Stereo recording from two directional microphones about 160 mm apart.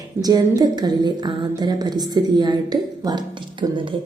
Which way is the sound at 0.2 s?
25° right (ahead or behind).